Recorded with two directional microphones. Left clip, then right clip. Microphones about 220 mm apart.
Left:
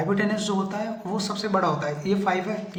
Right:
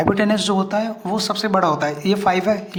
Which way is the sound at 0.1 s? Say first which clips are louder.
Right 7 dB; 40° right (ahead or behind).